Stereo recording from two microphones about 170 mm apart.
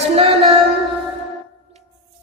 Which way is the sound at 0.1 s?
35° right (ahead or behind).